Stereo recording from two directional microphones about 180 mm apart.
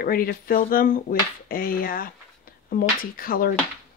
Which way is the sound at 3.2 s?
50° left (ahead or behind).